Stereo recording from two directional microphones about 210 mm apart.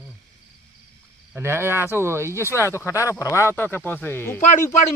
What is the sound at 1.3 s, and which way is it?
Speech, 10° right (ahead or behind).